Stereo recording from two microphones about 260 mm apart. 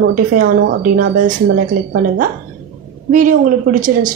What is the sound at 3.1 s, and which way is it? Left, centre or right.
A woman's voice, right.